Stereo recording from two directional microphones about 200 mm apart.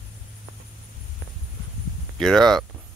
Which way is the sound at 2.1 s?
Centre (ahead or behind).